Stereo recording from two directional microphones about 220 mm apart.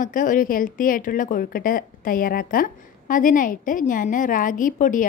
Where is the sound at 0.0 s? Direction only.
35° left (ahead or behind).